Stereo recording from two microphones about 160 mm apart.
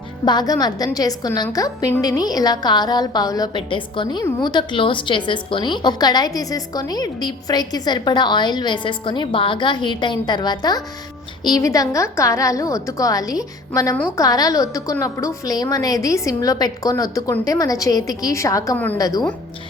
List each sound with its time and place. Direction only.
0.3 s a woman's voice: 25° left (ahead or behind)